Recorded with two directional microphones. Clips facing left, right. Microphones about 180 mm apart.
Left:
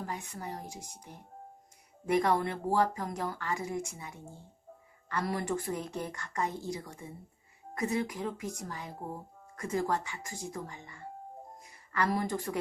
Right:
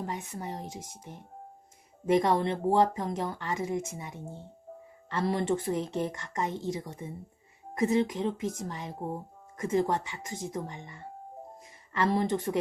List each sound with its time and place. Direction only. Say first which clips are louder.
0.0 s speech: right 3 dB; 20° right (ahead or behind)